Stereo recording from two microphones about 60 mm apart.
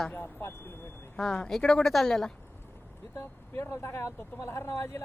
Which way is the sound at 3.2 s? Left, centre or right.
Left.